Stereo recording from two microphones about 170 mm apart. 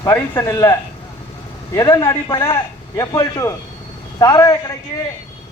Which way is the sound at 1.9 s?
25° left (ahead or behind).